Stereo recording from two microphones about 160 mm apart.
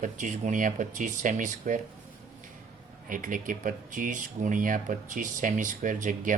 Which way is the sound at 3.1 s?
55° right (ahead or behind).